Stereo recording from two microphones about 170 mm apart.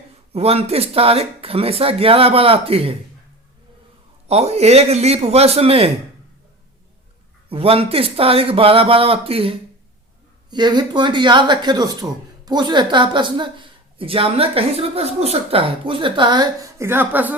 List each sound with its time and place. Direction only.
0.3 s speech: 35° right (ahead or behind)
4.3 s speech: 40° right (ahead or behind)
7.5 s speech: 35° right (ahead or behind); by 17.3 s 10° right (ahead or behind)